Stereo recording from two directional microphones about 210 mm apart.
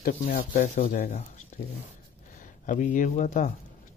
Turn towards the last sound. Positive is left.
turn(degrees=35)  # may be behind; listen again after turning